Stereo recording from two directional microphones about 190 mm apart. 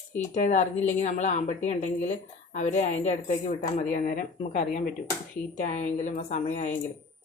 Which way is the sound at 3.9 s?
45° left (ahead or behind).